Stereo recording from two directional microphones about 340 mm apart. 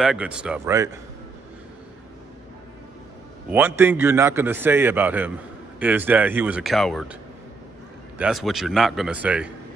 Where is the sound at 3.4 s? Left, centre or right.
Centre.